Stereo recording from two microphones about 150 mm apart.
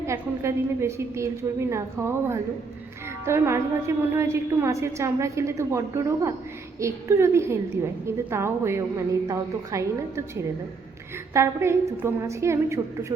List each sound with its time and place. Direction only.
0.0 s a woman's voice: 20° right (ahead or behind)
11.3 s a woman's voice: 20° right (ahead or behind)